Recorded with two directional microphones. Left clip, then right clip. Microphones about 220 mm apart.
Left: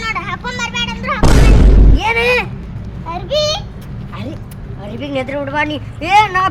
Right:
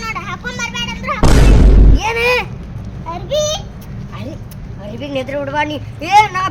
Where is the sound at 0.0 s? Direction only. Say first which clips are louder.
Left 3 dB; 10° left (ahead or behind).